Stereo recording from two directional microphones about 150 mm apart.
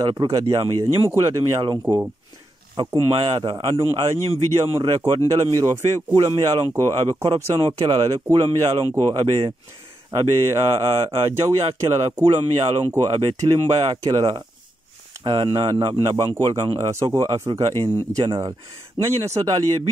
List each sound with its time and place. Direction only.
0.0 s speech: 25° right (ahead or behind)